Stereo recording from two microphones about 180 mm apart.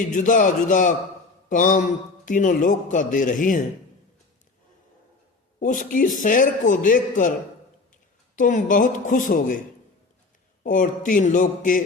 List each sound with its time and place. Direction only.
0.0 s a man's voice: 45° left (ahead or behind)
5.5 s a man's voice: 45° left (ahead or behind)
8.4 s a man's voice: 45° left (ahead or behind)
10.6 s a man's voice: 45° left (ahead or behind)